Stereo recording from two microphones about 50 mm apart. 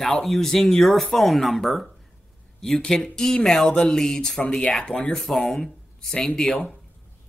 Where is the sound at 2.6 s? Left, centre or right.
Centre.